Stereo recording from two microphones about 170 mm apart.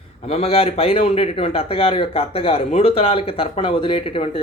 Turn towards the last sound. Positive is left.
turn(degrees=35)  # may be behind; listen again after turning